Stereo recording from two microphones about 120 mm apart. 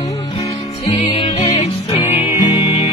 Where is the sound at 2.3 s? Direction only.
35° left (ahead or behind).